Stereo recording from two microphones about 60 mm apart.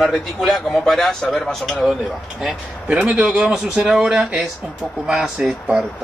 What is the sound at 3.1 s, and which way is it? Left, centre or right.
A man's voice, centre.